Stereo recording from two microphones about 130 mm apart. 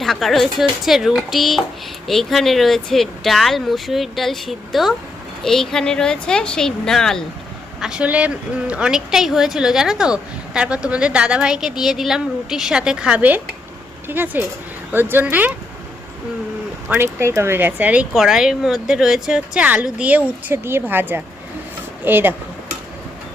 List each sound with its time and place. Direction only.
0.0 s speech: centre (ahead or behind)
7.8 s speech: 5° right (ahead or behind)
16.9 s speech: 20° right (ahead or behind)